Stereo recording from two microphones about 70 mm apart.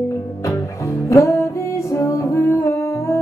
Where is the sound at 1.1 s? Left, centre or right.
Left.